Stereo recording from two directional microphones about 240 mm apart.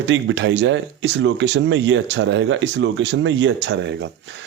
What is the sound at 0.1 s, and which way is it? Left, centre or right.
Speech, right.